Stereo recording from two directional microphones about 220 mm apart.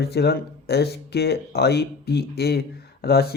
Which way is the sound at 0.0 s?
45° left (ahead or behind).